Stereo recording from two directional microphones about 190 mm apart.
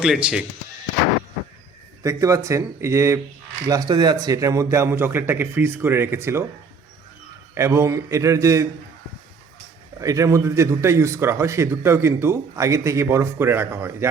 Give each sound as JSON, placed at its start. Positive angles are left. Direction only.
{"t": 0.0, "sound": "speech", "side_deg": -5}
{"t": 2.0, "sound": "a man's voice", "side_deg": -15}
{"t": 7.5, "sound": "a man's voice", "side_deg": -15}
{"t": 10.0, "sound": "a man's voice", "side_deg": -15}